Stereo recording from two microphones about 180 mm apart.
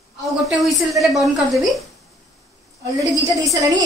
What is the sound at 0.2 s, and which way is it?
A woman's voice, centre (ahead or behind).